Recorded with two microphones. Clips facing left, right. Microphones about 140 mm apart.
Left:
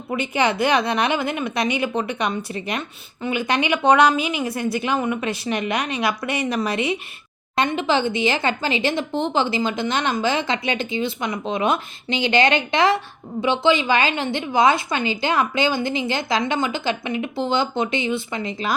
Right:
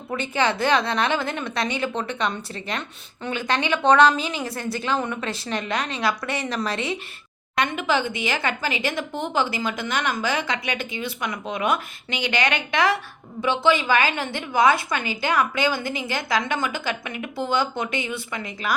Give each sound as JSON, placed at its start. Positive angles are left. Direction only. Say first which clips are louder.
{"t": 0.1, "sound": "a woman's voice", "louder": "left 2 dB", "side_deg": 15}
{"t": 7.5, "sound": "speech", "louder": "left 3 dB", "side_deg": 25}